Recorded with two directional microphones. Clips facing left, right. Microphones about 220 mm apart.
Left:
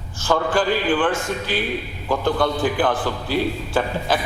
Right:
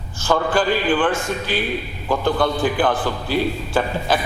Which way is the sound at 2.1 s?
25° right (ahead or behind).